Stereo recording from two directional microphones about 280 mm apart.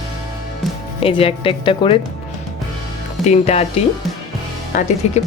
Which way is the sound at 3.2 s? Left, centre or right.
Left.